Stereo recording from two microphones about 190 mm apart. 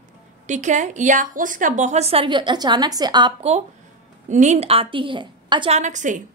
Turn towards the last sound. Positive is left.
turn(degrees=-40)  # may be behind; listen again after turning